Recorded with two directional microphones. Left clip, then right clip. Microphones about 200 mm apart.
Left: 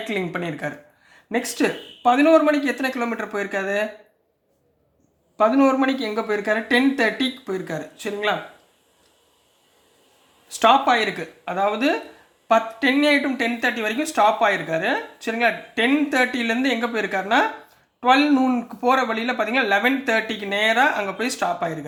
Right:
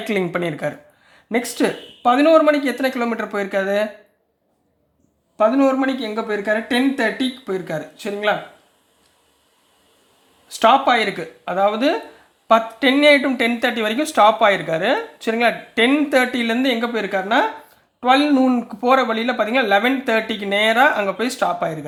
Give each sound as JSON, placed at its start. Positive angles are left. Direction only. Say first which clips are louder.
{"t": 0.1, "sound": "speech", "louder": "right 6 dB", "side_deg": -25}
{"t": 5.4, "sound": "speech", "louder": "right 1 dB", "side_deg": -5}
{"t": 10.5, "sound": "speech", "louder": "right 2 dB", "side_deg": -15}